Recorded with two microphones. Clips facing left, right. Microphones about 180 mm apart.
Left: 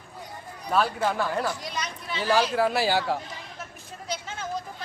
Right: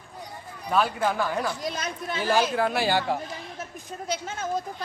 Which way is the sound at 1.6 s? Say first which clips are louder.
Right 4 dB; 50° right (ahead or behind).